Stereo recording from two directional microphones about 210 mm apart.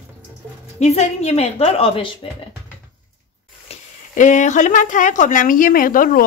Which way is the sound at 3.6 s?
35° left (ahead or behind).